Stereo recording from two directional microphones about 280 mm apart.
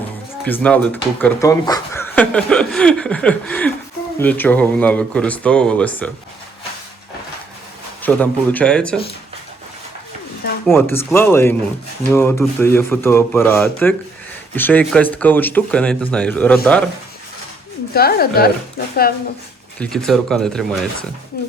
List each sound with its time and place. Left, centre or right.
0.4 s speech: centre
8.0 s speech: centre
10.7 s speech: centre
17.9 s speech: left
19.8 s speech: centre
21.3 s speech: left